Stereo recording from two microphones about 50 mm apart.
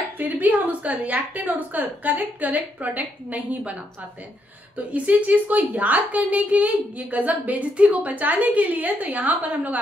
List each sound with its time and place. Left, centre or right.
0.2 s a woman's voice: right
4.7 s a woman's voice: right